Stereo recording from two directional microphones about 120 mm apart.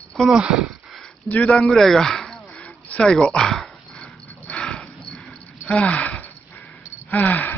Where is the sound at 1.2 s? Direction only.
10° left (ahead or behind).